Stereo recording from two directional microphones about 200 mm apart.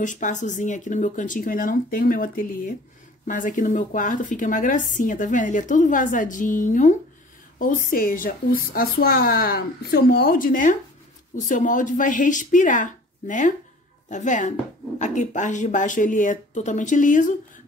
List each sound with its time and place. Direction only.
0.0 s a woman's voice: 40° left (ahead or behind)